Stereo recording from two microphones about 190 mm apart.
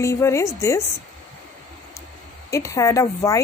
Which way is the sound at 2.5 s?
15° left (ahead or behind).